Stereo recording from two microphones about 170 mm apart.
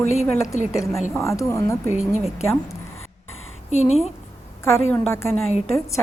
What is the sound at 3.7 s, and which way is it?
Speech, 40° left (ahead or behind).